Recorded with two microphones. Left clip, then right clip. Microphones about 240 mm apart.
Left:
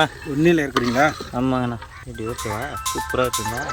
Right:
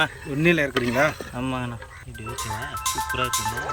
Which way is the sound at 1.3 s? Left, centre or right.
Left.